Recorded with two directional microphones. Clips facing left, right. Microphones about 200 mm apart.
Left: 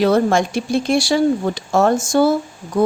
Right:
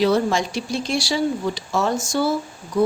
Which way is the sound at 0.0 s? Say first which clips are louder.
Left 4 dB; 55° left (ahead or behind).